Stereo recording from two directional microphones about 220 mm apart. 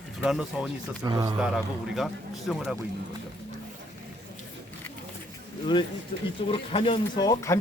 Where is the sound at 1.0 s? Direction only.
15° right (ahead or behind).